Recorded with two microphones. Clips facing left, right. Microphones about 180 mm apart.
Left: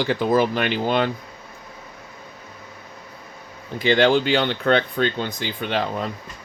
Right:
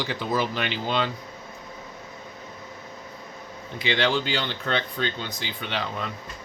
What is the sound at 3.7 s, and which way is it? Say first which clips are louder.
Speech: left 7 dB; 50° left (ahead or behind).